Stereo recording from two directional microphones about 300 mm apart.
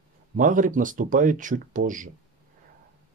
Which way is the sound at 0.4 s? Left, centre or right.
Right.